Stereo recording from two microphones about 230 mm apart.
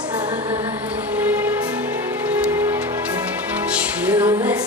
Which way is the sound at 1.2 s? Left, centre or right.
Centre.